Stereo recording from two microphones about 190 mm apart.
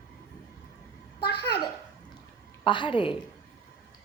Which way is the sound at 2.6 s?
25° left (ahead or behind).